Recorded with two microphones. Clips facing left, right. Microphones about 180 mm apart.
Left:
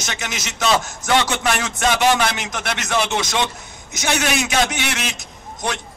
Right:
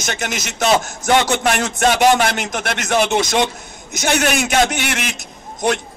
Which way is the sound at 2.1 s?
50° right (ahead or behind).